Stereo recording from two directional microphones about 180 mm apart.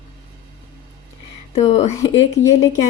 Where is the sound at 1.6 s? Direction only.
35° left (ahead or behind).